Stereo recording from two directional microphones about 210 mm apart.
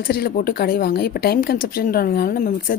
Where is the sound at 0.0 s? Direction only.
45° left (ahead or behind).